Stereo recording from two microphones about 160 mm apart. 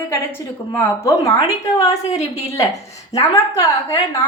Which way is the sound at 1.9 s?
45° left (ahead or behind).